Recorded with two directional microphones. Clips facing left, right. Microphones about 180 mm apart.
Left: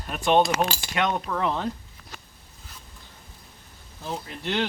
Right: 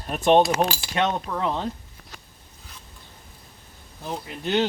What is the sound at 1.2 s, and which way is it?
Speech, 15° right (ahead or behind).